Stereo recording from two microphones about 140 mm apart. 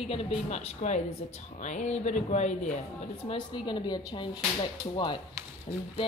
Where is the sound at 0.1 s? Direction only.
45° left (ahead or behind).